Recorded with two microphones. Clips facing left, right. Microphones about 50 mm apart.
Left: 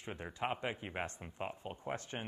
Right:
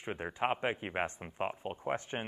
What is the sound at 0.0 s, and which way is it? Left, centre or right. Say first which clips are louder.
Speech: right 6 dB; right.